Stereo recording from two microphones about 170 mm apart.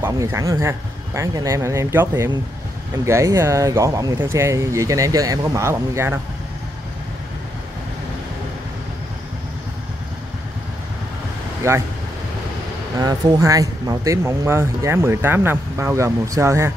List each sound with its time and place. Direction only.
0.0 s speech: 15° right (ahead or behind)
11.6 s speech: 15° right (ahead or behind)
13.0 s speech: 20° right (ahead or behind)